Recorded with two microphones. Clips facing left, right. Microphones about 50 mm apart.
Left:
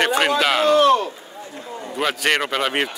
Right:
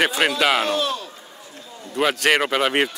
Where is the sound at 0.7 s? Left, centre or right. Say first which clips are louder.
Left 9 dB; left.